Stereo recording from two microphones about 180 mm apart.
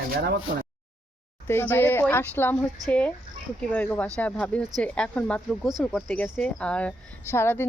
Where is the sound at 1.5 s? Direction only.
10° left (ahead or behind).